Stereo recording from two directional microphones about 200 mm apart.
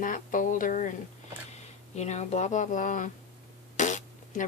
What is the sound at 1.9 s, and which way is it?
Speech, 35° left (ahead or behind).